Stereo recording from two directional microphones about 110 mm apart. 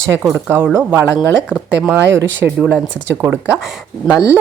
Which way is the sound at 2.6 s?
5° right (ahead or behind).